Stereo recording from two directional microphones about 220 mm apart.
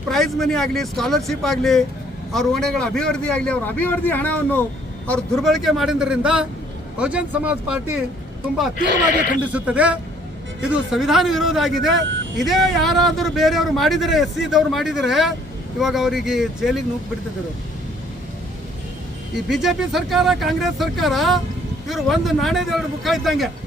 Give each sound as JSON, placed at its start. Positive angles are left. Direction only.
{"t": 0.1, "sound": "a man's voice", "side_deg": 0}
{"t": 9.4, "sound": "a man's voice", "side_deg": -5}
{"t": 12.0, "sound": "vehicle", "side_deg": -55}
{"t": 12.4, "sound": "a man's voice", "side_deg": 0}
{"t": 19.5, "sound": "a man's voice", "side_deg": 0}